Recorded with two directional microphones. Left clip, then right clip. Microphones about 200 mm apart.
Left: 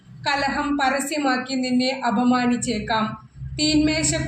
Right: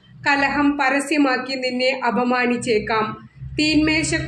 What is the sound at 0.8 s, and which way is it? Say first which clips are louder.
A woman's voice: right 3 dB; 30° right (ahead or behind).